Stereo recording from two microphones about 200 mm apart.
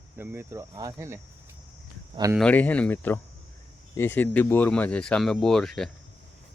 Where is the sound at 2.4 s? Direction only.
5° left (ahead or behind).